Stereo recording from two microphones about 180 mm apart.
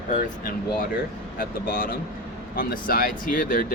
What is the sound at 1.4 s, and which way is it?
Speech, 55° left (ahead or behind).